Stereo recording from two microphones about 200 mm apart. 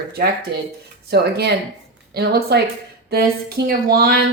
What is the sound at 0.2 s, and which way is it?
Speech, 50° right (ahead or behind).